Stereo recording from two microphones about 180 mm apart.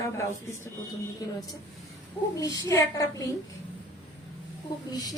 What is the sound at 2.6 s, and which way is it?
Speech, 20° left (ahead or behind).